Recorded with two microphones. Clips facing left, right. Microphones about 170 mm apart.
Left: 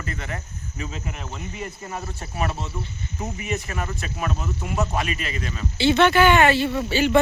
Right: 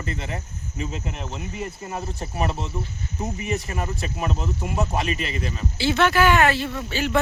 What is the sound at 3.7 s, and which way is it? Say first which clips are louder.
Speech: right 1 dB; 25° right (ahead or behind).